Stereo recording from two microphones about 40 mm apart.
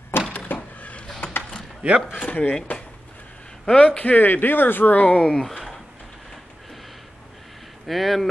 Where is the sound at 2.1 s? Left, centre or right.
Left.